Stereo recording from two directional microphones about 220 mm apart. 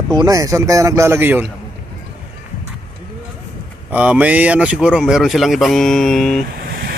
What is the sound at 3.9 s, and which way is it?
A man's voice, 5° right (ahead or behind).